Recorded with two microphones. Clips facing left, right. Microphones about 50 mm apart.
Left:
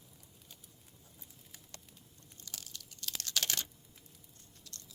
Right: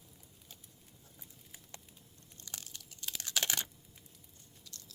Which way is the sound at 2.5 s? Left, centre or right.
Right.